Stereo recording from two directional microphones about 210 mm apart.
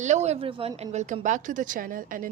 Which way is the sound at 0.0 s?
35° right (ahead or behind).